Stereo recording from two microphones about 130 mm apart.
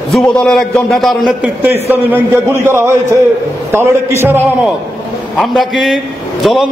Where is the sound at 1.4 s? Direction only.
15° right (ahead or behind).